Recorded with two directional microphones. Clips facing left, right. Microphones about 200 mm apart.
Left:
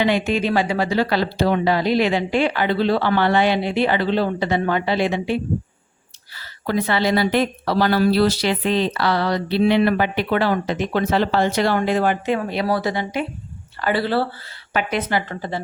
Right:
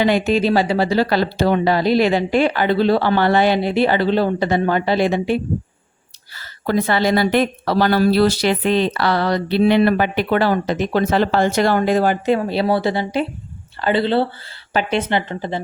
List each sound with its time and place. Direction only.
0.0 s speech: 40° right (ahead or behind)
6.7 s a woman's voice: 45° right (ahead or behind); by 15.6 s 20° right (ahead or behind)